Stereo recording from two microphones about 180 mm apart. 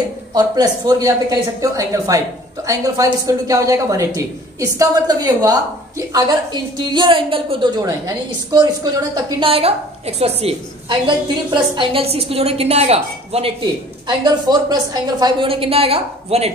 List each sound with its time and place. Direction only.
0.3 s speech: 20° right (ahead or behind)
14.0 s a woman's voice: 20° right (ahead or behind)